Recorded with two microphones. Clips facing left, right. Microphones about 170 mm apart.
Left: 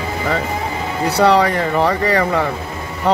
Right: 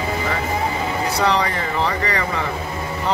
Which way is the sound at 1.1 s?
65° left (ahead or behind).